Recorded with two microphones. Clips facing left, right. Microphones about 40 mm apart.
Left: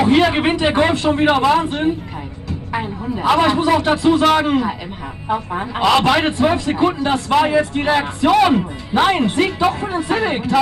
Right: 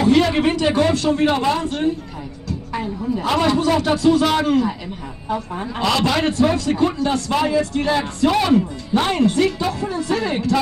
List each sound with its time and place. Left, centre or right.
0.0 s a man's voice: left